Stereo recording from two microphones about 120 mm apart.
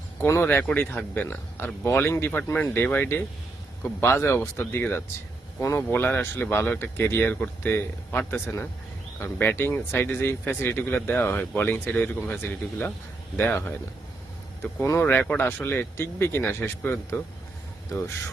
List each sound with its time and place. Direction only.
0.2 s speech: 20° left (ahead or behind)